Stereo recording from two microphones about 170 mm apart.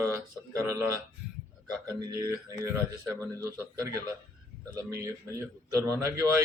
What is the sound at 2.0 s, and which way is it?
A man's voice, 20° right (ahead or behind).